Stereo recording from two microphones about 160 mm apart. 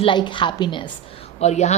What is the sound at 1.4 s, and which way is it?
Speech, 45° left (ahead or behind).